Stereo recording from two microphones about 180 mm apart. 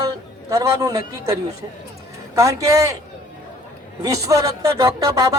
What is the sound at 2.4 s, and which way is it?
Speech, 15° right (ahead or behind).